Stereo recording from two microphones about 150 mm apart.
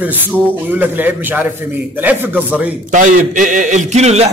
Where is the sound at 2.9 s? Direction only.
60° right (ahead or behind).